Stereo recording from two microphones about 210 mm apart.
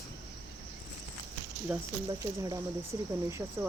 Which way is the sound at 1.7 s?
5° right (ahead or behind).